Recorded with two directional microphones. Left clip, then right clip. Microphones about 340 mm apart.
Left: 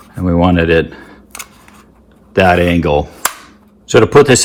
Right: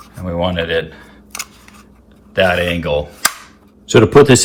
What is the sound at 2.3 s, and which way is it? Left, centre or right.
Speech, centre.